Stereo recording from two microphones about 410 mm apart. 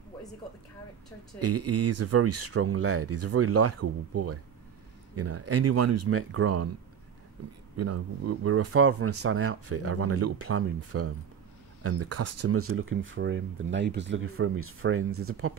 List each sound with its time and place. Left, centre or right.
1.4 s speech: right
7.7 s speech: right